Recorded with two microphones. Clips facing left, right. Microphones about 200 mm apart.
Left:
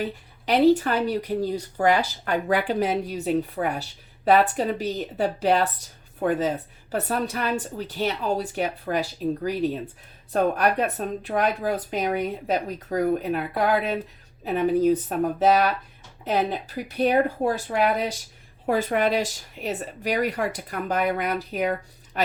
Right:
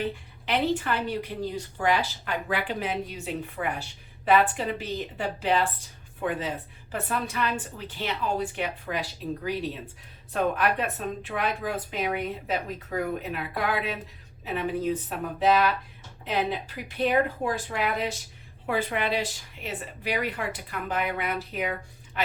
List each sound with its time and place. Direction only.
0.0 s a woman's voice: 40° left (ahead or behind)